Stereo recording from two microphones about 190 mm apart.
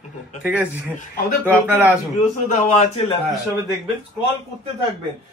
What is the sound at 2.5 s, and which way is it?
Speech, 40° left (ahead or behind).